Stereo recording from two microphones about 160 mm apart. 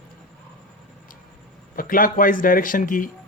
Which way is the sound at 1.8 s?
60° left (ahead or behind).